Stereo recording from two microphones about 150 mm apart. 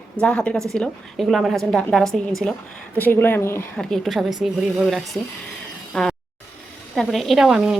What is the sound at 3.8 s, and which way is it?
A woman's voice, centre (ahead or behind).